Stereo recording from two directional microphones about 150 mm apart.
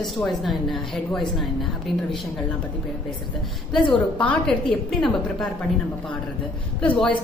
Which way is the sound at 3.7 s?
35° left (ahead or behind).